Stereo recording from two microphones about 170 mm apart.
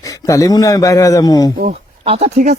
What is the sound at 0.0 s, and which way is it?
A man's voice, 20° left (ahead or behind).